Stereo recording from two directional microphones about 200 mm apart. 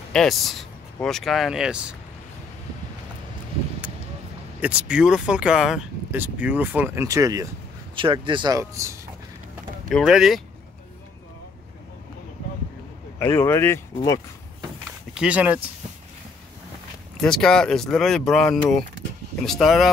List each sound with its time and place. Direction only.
0.1 s speech: centre (ahead or behind)
4.6 s speech: 5° right (ahead or behind)
9.8 s speech: centre (ahead or behind)
13.2 s speech: 10° left (ahead or behind)
15.1 s speech: 5° right (ahead or behind)
17.2 s speech: 5° left (ahead or behind)